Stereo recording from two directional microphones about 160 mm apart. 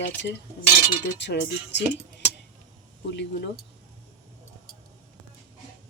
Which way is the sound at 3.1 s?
90° left.